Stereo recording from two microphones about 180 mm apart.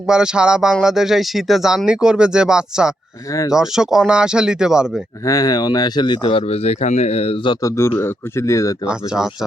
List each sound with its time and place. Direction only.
0.1 s speech: 5° right (ahead or behind)
5.2 s speech: 20° left (ahead or behind)
8.9 s speech: 5° right (ahead or behind)